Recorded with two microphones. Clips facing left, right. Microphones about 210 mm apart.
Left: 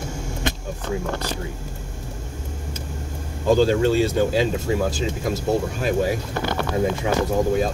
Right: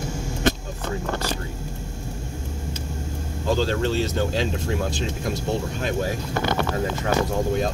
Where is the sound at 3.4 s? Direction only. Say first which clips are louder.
Left 6 dB; 10° left (ahead or behind).